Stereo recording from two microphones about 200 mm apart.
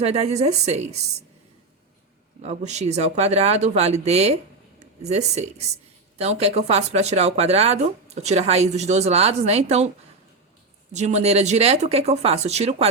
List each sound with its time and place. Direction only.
0.0 s speech: 30° right (ahead or behind)
2.4 s speech: 35° right (ahead or behind)
10.9 s speech: 35° right (ahead or behind)